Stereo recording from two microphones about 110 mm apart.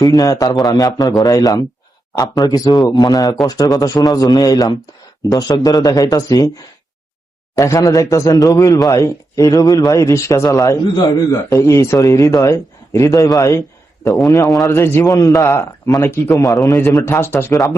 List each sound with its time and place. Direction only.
0.0 s speech: 35° left (ahead or behind)
7.5 s speech: 30° left (ahead or behind)
14.7 s speech: 20° left (ahead or behind)
15.1 s speech: 30° left (ahead or behind)